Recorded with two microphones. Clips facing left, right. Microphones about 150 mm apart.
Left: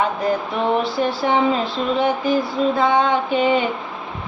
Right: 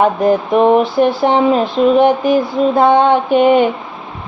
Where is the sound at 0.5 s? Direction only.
50° right (ahead or behind).